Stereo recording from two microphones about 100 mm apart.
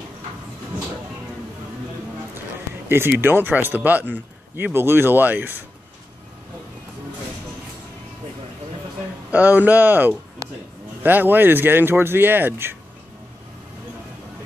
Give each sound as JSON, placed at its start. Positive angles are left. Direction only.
{"t": 2.9, "sound": "speech", "side_deg": -25}
{"t": 9.3, "sound": "speech", "side_deg": -15}
{"t": 10.4, "sound": "a sound", "side_deg": -30}
{"t": 11.0, "sound": "speech", "side_deg": -20}